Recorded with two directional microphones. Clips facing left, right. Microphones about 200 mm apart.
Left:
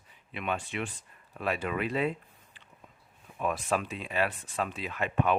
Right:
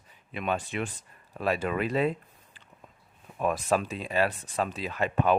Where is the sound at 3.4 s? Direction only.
40° right (ahead or behind).